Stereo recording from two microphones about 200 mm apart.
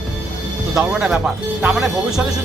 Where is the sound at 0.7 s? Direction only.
5° right (ahead or behind).